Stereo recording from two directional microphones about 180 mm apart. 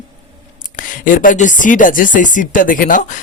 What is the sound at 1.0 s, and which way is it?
Speech, 50° left (ahead or behind).